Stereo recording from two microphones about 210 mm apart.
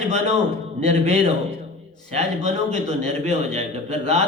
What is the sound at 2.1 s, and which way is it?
A man's voice, 30° right (ahead or behind).